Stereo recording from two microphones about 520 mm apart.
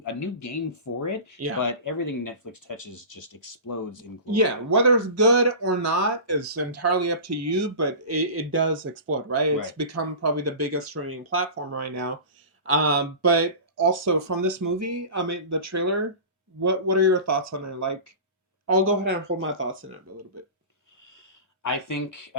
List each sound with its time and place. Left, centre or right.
0.0 s speech: left
4.3 s speech: right
21.6 s speech: left